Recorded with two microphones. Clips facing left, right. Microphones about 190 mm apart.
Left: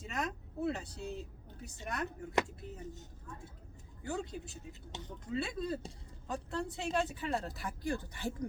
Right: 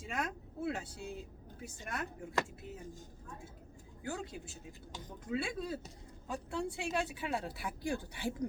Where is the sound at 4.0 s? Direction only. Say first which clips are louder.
Left 2 dB; 5° right (ahead or behind).